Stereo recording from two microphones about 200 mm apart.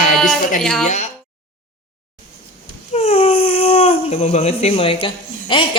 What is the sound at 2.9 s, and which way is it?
Speech, 30° left (ahead or behind).